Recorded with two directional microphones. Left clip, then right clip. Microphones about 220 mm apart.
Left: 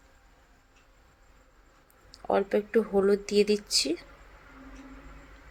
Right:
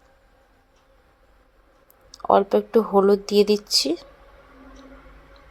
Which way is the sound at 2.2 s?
15° right (ahead or behind).